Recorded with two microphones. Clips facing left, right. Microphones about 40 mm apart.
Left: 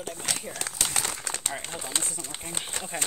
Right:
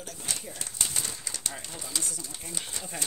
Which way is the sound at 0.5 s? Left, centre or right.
Left.